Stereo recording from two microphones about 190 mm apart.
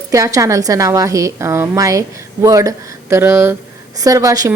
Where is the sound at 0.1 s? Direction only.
15° right (ahead or behind).